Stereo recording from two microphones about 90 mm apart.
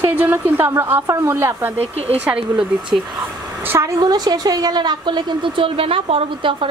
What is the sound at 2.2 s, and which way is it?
Speech, 15° right (ahead or behind).